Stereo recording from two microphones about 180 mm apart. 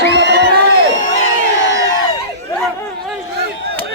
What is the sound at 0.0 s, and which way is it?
Crowd, 75° left (ahead or behind).